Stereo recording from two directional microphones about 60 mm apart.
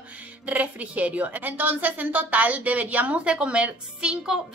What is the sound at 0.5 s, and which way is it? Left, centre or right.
A woman's voice, right.